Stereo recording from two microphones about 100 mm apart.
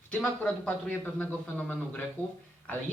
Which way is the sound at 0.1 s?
10° left (ahead or behind).